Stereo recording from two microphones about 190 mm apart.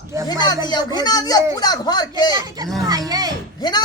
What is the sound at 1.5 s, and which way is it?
Speech, 20° left (ahead or behind).